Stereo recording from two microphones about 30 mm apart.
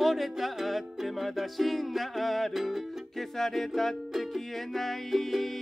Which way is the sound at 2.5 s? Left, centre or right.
Centre.